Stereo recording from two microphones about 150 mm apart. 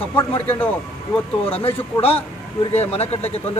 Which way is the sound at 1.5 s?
40° left (ahead or behind).